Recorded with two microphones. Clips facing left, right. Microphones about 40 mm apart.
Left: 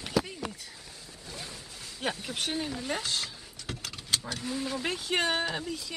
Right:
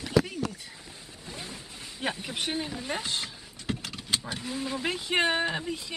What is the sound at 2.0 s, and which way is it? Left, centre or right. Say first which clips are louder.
Speech: right 1 dB; centre.